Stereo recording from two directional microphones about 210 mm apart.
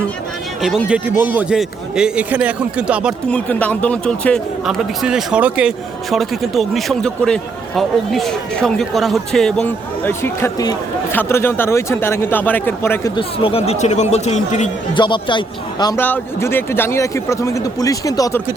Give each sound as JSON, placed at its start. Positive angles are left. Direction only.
{"t": 0.6, "sound": "speech", "side_deg": -5}
{"t": 3.2, "sound": "a man's voice", "side_deg": 5}
{"t": 13.1, "sound": "speech", "side_deg": 25}
{"t": 14.9, "sound": "a man's voice", "side_deg": 20}